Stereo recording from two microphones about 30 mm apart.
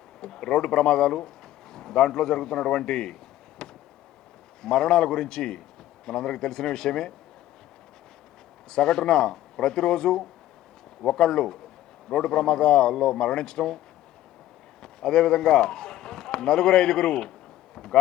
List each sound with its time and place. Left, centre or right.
0.2 s a man's voice: left
3.6 s a sound: left
4.6 s a man's voice: left
8.7 s a man's voice: left
14.8 s a man's voice: left